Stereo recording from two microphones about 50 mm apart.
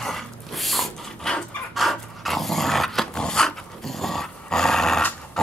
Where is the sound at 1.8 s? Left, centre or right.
Centre.